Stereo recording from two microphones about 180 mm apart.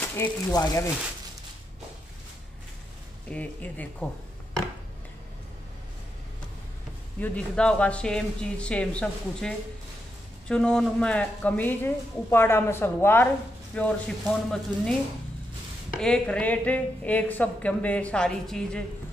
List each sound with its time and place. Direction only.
0.0 s a woman's voice: 20° left (ahead or behind)
3.3 s a woman's voice: 10° left (ahead or behind)
7.2 s a woman's voice: 5° left (ahead or behind)
10.5 s a woman's voice: 5° left (ahead or behind)